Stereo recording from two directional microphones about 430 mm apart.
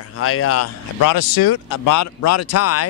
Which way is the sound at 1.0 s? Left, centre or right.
Left.